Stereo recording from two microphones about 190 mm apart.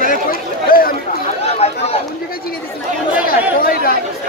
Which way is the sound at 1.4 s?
35° left (ahead or behind).